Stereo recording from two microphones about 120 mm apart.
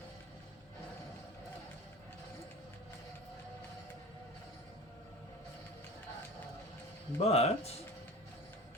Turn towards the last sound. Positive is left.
turn(degrees=60)  # may be behind; listen again after turning